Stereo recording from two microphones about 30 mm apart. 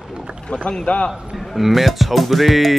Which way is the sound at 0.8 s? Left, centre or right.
Left.